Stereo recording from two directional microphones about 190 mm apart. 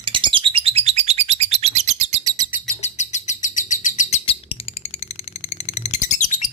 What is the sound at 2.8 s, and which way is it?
Bird, 40° left (ahead or behind).